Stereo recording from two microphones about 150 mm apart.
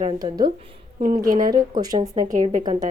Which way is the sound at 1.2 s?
65° right (ahead or behind).